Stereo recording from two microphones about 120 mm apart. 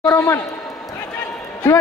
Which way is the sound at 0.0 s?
25° left (ahead or behind).